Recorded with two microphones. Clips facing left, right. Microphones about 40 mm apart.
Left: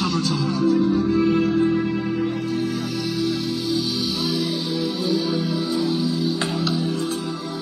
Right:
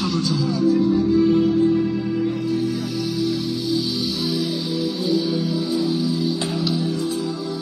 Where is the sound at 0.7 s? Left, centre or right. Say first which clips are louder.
Right 1 dB; left.